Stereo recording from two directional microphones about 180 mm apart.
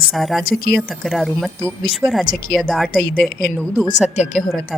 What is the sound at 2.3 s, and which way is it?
Speech, 50° left (ahead or behind).